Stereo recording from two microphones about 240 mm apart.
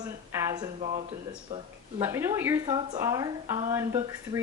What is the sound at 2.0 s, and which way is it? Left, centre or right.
Speech, centre.